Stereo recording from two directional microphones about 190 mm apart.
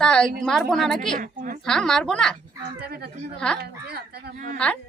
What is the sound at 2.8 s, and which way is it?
Speech, 55° right (ahead or behind).